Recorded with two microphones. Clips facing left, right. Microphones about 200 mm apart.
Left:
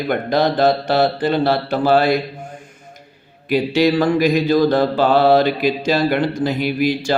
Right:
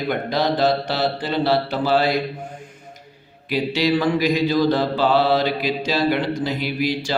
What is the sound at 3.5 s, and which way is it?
Speech, 50° left (ahead or behind).